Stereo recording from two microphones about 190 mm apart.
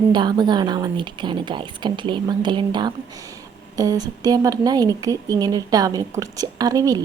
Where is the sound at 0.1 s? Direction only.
20° right (ahead or behind).